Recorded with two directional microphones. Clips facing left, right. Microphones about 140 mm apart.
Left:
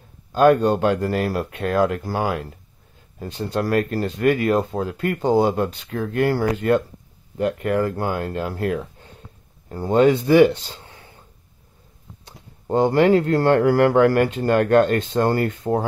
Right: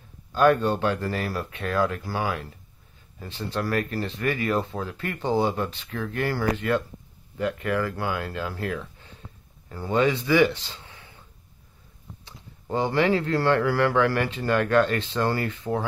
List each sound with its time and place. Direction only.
0.3 s speech: 40° left (ahead or behind)
10.8 s a sound: 45° left (ahead or behind)
12.3 s speech: 45° left (ahead or behind)